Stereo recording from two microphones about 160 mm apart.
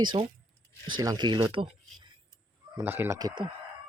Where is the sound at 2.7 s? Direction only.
15° right (ahead or behind).